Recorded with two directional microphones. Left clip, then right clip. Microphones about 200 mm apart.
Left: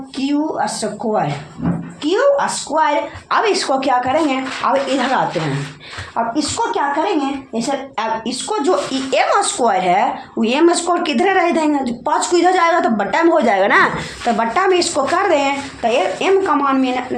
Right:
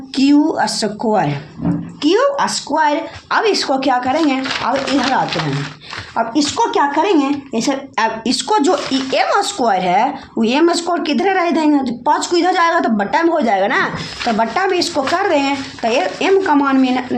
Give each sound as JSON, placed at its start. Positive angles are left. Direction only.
{"t": 0.2, "sound": "a woman's voice", "side_deg": -35}
{"t": 2.0, "sound": "a woman's voice", "side_deg": -20}
{"t": 6.1, "sound": "a woman's voice", "side_deg": -30}
{"t": 8.9, "sound": "speech", "side_deg": -15}